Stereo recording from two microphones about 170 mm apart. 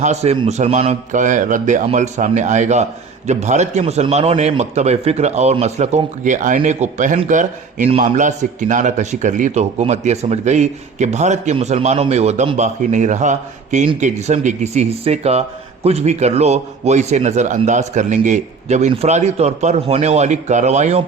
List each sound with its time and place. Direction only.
0.0 s a man's voice: 40° right (ahead or behind)